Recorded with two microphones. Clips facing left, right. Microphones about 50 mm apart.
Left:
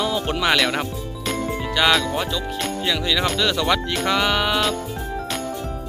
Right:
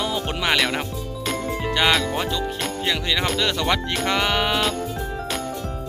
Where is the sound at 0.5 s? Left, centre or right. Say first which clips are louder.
Even; centre.